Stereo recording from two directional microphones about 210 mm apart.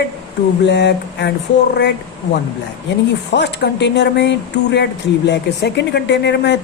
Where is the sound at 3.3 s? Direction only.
55° left (ahead or behind).